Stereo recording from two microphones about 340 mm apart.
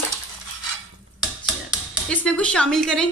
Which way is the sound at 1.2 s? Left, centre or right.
Centre.